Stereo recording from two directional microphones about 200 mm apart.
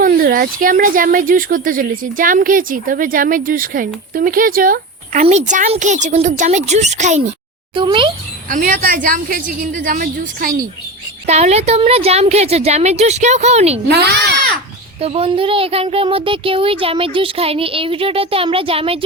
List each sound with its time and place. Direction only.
0.0 s a woman's voice: 45° right (ahead or behind)
7.8 s a child's voice: 25° right (ahead or behind)
8.4 s a woman's voice: 40° right (ahead or behind)
13.8 s a child's voice: 55° right (ahead or behind)
15.0 s a child's voice: 30° right (ahead or behind)